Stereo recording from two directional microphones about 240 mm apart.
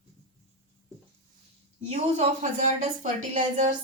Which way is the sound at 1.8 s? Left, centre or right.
Right.